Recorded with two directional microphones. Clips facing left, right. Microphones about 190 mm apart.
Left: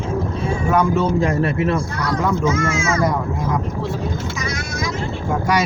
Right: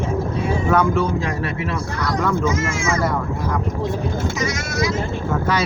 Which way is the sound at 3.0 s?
15° left (ahead or behind).